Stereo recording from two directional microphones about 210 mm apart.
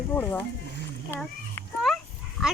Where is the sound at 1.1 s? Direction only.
10° left (ahead or behind).